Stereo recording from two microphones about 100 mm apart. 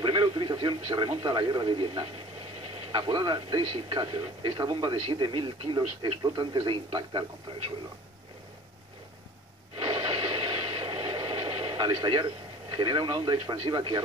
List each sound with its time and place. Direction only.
0.0 s radio: 55° right (ahead or behind)
1.2 s speech: 50° right (ahead or behind)
9.8 s a sound: 50° right (ahead or behind)